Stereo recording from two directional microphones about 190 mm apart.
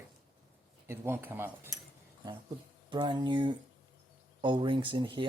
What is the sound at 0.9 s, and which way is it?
Speech, 10° right (ahead or behind).